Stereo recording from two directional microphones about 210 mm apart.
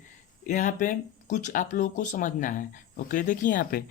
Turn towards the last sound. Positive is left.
turn(degrees=40)  # may be behind; listen again after turning